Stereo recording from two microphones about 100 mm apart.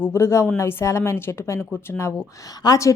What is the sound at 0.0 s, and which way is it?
A woman's voice, 25° left (ahead or behind).